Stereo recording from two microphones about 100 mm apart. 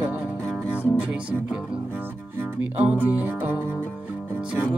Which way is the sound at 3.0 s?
20° right (ahead or behind).